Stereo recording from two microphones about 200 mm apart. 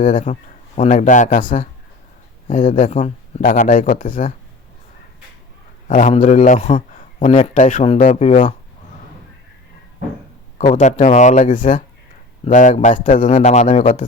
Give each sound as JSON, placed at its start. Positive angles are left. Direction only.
{"t": 0.0, "sound": "a man's voice", "side_deg": 40}
{"t": 5.9, "sound": "a man's voice", "side_deg": 40}
{"t": 10.7, "sound": "a man's voice", "side_deg": 35}